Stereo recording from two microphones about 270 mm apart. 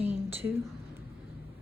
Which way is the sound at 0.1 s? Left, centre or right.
Centre.